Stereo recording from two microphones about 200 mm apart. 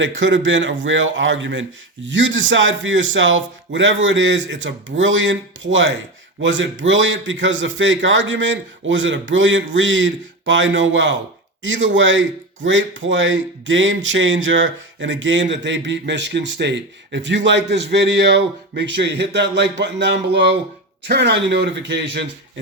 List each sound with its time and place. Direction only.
0.0 s speech: 70° right (ahead or behind)